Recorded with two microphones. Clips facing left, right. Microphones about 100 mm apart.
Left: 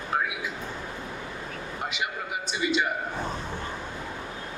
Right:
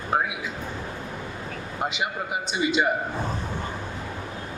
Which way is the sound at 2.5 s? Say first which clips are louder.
Right 3 dB; 25° right (ahead or behind).